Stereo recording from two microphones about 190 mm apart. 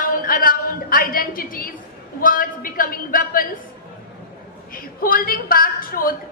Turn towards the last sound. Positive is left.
turn(degrees=50)  # may be behind; listen again after turning